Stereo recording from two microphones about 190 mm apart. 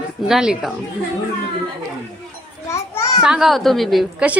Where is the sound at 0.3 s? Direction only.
Centre (ahead or behind).